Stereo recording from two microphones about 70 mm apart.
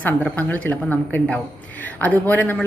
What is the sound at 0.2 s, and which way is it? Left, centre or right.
Speech, left.